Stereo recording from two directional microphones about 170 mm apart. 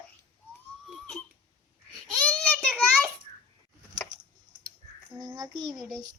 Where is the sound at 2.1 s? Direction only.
5° left (ahead or behind).